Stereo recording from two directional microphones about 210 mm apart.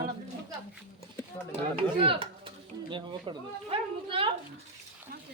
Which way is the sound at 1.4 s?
15° left (ahead or behind).